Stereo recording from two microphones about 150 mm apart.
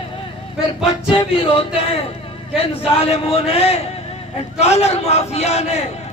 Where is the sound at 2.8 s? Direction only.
40° left (ahead or behind).